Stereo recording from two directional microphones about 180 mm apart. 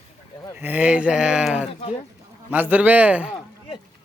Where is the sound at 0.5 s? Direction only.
10° right (ahead or behind).